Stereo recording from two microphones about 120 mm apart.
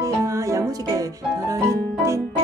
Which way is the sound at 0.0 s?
25° right (ahead or behind).